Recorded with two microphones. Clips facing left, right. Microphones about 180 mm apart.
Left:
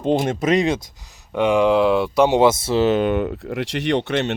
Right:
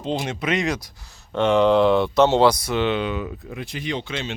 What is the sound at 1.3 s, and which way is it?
Speech, 10° left (ahead or behind).